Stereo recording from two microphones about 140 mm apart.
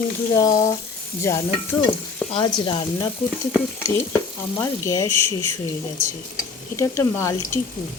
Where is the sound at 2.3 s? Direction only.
35° left (ahead or behind).